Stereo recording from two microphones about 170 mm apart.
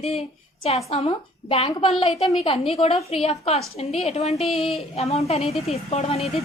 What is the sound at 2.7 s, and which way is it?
A woman's voice, 35° left (ahead or behind).